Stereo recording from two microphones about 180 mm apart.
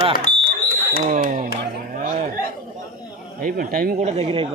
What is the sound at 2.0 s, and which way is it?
Music, 50° right (ahead or behind).